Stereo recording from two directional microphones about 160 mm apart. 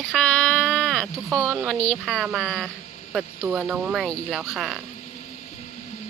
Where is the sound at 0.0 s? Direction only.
Centre (ahead or behind).